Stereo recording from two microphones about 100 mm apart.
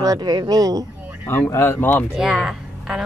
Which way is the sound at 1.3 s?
25° left (ahead or behind).